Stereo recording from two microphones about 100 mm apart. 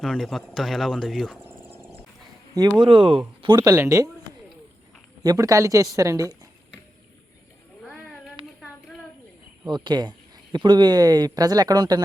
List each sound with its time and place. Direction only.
0.0 s speech: centre (ahead or behind)
2.7 s speech: 50° right (ahead or behind)
3.4 s speech: 40° right (ahead or behind)
3.8 s speech: 30° right (ahead or behind)
5.2 s speech: 35° right (ahead or behind)
7.8 s a sound: 5° left (ahead or behind)
9.6 s speech: 50° right (ahead or behind)